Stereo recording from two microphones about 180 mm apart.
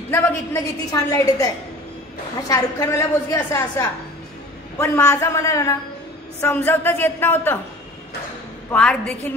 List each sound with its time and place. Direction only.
0.1 s a woman's voice: 15° left (ahead or behind)
8.6 s a woman's voice: 5° left (ahead or behind)